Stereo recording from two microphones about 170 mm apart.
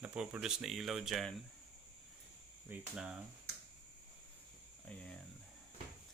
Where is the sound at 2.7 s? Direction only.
10° right (ahead or behind).